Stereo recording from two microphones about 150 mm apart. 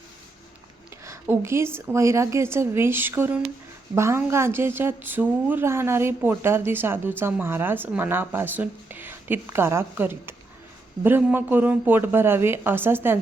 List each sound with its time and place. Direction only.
1.0 s speech: 20° right (ahead or behind)